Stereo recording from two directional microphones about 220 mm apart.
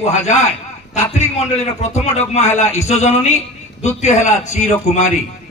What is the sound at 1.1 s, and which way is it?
A man's voice, 30° left (ahead or behind).